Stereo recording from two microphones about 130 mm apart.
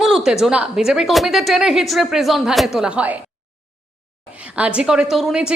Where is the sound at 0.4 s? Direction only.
5° right (ahead or behind).